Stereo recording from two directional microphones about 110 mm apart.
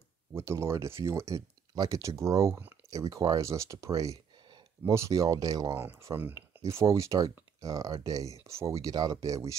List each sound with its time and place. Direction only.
0.3 s speech: 25° right (ahead or behind)
5.8 s speech: 20° right (ahead or behind)